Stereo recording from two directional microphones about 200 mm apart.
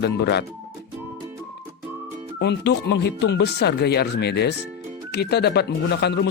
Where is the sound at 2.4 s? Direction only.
60° left (ahead or behind).